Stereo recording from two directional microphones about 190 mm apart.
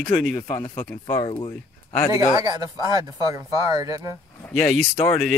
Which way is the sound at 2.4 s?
20° right (ahead or behind).